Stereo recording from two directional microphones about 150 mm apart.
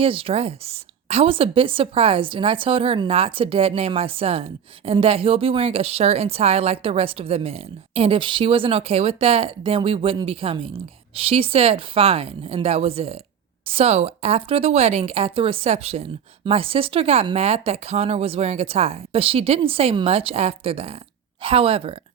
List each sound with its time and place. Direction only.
0.0 s a woman's voice: 40° right (ahead or behind)